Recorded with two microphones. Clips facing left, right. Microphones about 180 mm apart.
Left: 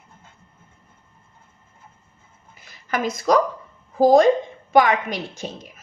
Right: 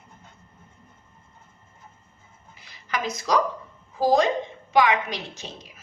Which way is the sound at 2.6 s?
45° left (ahead or behind).